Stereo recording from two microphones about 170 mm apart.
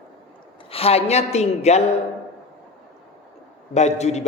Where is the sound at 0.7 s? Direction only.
35° left (ahead or behind).